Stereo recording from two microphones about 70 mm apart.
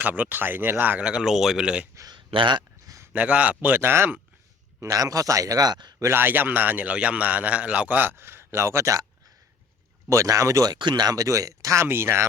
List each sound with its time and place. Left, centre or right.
0.0 s a man's voice: right
1.0 s speech: centre
2.0 s a sound: right
3.1 s a man's voice: right
4.8 s speech: right
6.0 s a man's voice: right
10.1 s speech: right
10.7 s speech: right
11.9 s speech: right